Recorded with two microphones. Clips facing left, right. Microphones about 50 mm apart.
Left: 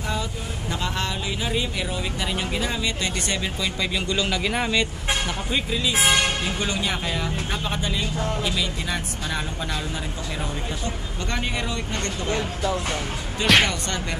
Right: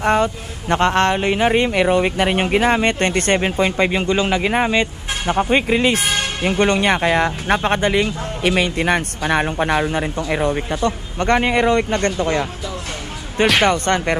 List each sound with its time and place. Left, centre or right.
0.0 s speech: right
13.7 s speech: right